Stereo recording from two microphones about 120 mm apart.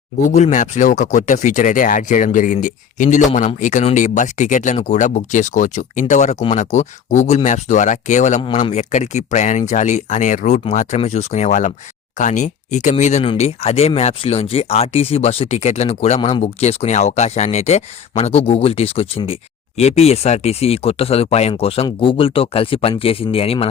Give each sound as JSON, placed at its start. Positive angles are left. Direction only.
{"t": 0.3, "sound": "speech", "side_deg": 80}
{"t": 13.3, "sound": "speech", "side_deg": 60}